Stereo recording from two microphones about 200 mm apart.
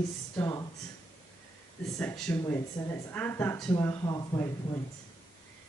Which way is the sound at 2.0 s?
5° left (ahead or behind).